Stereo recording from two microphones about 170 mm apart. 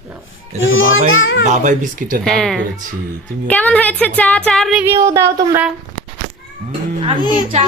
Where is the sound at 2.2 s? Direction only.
5° left (ahead or behind).